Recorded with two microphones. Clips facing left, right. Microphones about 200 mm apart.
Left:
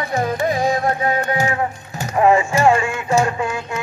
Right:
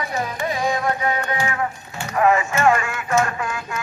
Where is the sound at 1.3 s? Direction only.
30° left (ahead or behind).